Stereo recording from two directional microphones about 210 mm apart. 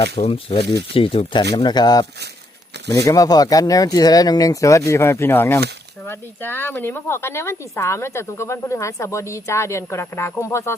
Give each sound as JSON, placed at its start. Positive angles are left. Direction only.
{"t": 0.0, "sound": "speech", "side_deg": 25}
{"t": 0.6, "sound": "speech", "side_deg": -50}
{"t": 0.9, "sound": "speech", "side_deg": 25}